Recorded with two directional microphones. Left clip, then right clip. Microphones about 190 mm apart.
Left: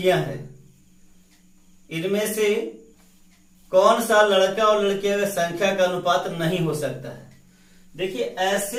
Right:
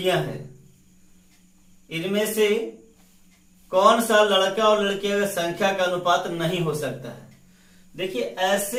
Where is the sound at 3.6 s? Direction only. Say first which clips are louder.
Left 1 dB; 20° right (ahead or behind).